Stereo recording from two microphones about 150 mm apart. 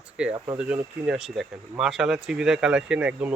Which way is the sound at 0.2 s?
5° right (ahead or behind).